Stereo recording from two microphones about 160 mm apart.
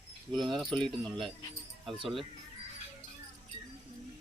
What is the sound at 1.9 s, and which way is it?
Speech, 35° right (ahead or behind).